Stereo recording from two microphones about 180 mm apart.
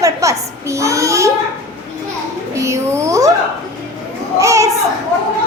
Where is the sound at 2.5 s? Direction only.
15° right (ahead or behind).